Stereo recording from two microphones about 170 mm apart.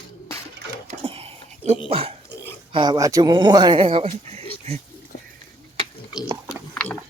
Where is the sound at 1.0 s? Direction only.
35° right (ahead or behind).